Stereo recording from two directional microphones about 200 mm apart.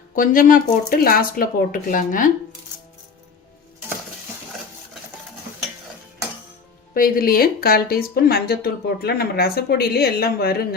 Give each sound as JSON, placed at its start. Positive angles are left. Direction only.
{"t": 0.2, "sound": "speech", "side_deg": 40}
{"t": 6.9, "sound": "speech", "side_deg": 45}